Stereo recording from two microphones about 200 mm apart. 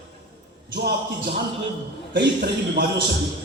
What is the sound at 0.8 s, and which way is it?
Speech, 50° right (ahead or behind).